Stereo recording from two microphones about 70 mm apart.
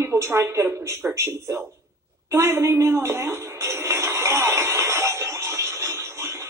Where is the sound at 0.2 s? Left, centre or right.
Right.